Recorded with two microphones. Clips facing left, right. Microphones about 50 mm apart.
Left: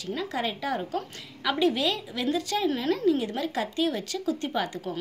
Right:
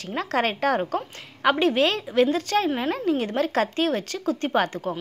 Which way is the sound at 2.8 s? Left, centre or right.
Right.